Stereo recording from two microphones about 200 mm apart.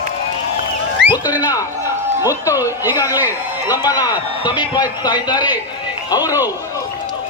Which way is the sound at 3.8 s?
20° left (ahead or behind).